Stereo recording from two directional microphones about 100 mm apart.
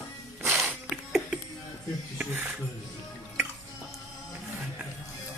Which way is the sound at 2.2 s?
15° right (ahead or behind).